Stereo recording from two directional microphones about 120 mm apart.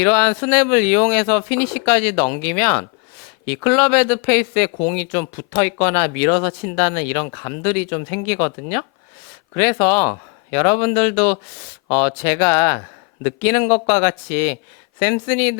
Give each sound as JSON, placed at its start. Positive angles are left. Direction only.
{"t": 0.0, "sound": "speech", "side_deg": 15}